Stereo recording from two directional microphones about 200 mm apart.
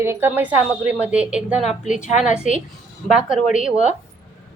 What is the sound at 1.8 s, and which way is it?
Speech, 35° left (ahead or behind).